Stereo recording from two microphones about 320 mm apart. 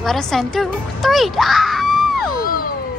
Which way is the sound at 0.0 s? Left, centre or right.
Centre.